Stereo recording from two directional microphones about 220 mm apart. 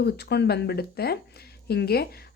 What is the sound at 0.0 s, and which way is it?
Speech, 50° left (ahead or behind).